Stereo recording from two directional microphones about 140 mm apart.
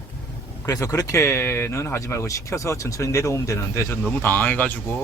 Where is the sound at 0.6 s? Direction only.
20° left (ahead or behind).